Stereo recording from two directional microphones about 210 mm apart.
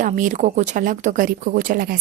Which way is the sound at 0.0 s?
35° right (ahead or behind).